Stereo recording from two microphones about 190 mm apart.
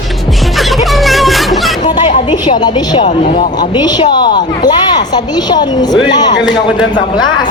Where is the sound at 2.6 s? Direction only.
25° left (ahead or behind).